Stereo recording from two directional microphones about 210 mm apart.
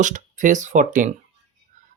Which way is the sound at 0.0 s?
35° right (ahead or behind).